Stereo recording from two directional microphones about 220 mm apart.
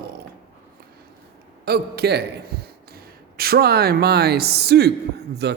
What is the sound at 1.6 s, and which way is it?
A man's voice, 45° right (ahead or behind).